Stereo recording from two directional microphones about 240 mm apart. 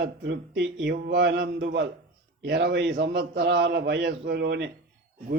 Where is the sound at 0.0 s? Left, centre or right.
Right.